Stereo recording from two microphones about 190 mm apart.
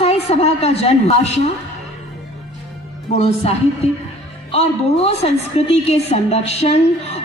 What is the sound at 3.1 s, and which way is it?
A woman's voice, 35° left (ahead or behind).